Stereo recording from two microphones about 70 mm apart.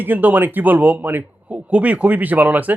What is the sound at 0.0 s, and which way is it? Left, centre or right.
Speech, right.